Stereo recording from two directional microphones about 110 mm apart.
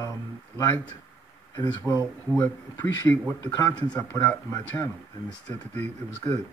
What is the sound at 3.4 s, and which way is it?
Speech, 35° left (ahead or behind).